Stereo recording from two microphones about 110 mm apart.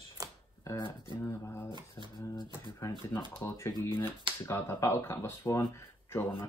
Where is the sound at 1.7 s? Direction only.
40° right (ahead or behind).